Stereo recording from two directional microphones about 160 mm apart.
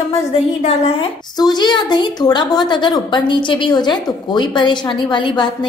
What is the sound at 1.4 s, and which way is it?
A woman's voice, 25° left (ahead or behind).